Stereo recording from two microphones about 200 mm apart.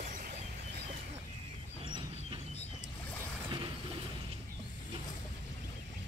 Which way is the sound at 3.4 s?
25° right (ahead or behind).